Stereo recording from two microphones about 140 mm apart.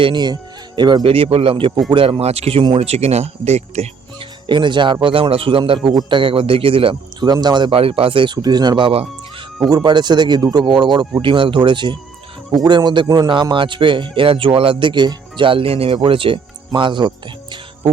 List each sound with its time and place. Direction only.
0.0 s speech: 30° right (ahead or behind); by 3.8 s 50° right (ahead or behind)
4.4 s speech: 35° right (ahead or behind)
9.6 s speech: 30° right (ahead or behind)